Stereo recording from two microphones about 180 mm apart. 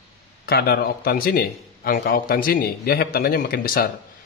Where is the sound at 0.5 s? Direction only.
60° left (ahead or behind).